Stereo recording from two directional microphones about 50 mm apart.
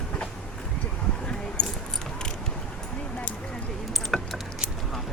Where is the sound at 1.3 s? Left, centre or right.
Centre.